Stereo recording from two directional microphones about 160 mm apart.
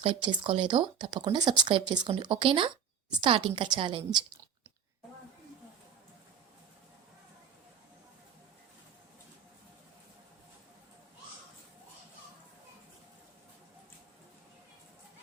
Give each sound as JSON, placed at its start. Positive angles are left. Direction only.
{"t": 0.0, "sound": "speech", "side_deg": -30}